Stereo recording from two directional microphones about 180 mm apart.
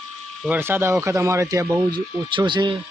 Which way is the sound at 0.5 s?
10° right (ahead or behind).